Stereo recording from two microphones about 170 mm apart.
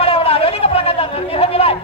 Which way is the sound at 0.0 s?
35° left (ahead or behind).